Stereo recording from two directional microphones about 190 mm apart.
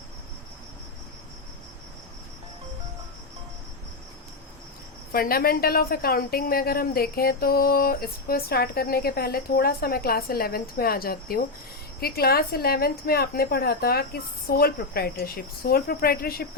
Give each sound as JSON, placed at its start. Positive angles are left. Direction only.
{"t": 5.1, "sound": "a woman's voice", "side_deg": 50}